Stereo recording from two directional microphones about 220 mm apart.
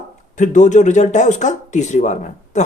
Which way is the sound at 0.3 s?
35° left (ahead or behind).